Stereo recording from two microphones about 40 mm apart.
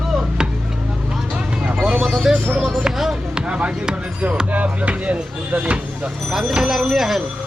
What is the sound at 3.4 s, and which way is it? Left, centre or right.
Speech, right.